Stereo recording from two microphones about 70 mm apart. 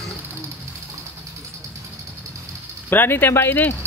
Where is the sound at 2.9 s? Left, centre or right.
Left.